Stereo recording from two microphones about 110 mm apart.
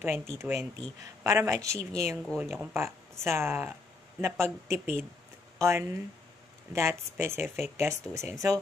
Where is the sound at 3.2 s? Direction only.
20° right (ahead or behind).